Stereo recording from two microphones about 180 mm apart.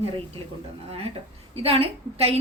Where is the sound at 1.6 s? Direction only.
30° right (ahead or behind).